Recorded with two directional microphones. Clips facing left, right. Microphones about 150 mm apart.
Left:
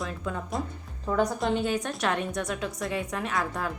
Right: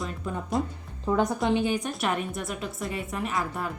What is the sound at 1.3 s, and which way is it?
A woman's voice, 5° right (ahead or behind).